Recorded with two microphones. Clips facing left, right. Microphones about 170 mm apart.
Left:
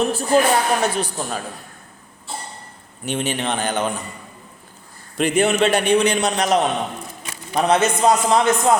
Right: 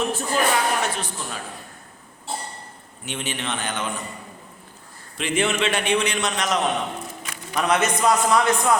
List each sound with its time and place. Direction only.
0.0 s speech: 35° left (ahead or behind)
3.1 s a man's voice: 35° left (ahead or behind)
5.1 s a man's voice: 40° left (ahead or behind); by 8.7 s 25° left (ahead or behind)